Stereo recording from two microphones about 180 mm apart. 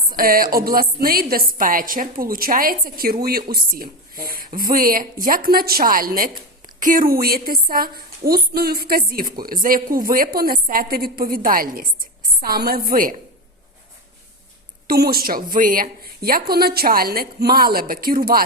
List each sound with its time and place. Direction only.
0.1 s music: 55° right (ahead or behind)
0.5 s a woman's voice: 55° right (ahead or behind)
14.8 s a woman's voice: 60° right (ahead or behind)